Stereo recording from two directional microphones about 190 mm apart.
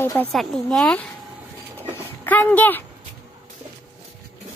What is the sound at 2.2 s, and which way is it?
Speech, 10° left (ahead or behind).